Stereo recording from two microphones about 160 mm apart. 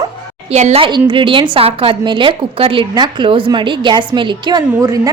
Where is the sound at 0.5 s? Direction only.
40° right (ahead or behind).